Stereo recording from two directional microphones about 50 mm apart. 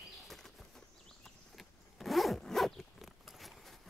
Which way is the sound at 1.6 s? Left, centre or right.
Centre.